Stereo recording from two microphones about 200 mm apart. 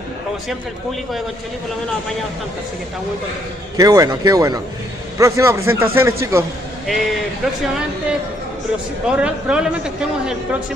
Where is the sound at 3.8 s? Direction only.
15° right (ahead or behind).